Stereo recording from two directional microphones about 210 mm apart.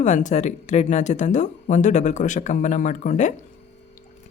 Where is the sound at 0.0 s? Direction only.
35° left (ahead or behind).